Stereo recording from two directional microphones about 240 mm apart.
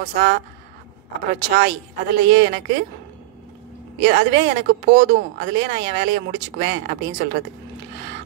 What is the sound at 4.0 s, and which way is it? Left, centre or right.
Speech, right.